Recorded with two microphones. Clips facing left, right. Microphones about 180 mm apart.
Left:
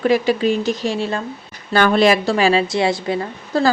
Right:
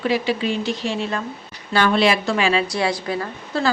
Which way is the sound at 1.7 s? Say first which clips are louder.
Left 4 dB; 45° left (ahead or behind).